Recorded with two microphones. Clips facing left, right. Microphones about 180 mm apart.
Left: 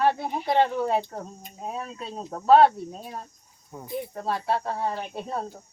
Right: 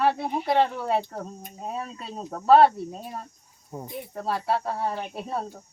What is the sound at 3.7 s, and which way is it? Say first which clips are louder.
Speech: right 4 dB; 25° right (ahead or behind).